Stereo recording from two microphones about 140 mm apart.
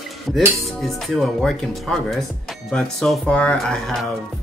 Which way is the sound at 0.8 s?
Centre (ahead or behind).